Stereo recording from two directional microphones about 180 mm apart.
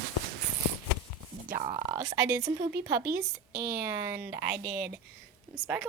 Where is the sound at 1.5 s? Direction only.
45° right (ahead or behind).